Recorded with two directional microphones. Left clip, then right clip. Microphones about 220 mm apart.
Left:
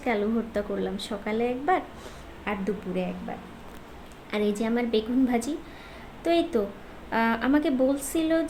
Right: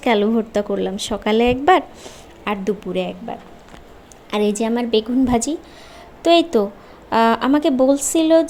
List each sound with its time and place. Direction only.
0.0 s speech: 35° right (ahead or behind)